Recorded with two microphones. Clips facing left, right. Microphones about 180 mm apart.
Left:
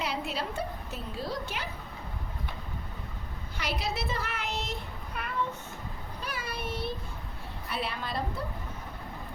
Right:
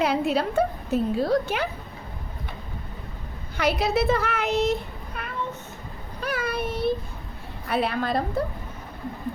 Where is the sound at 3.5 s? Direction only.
60° right (ahead or behind).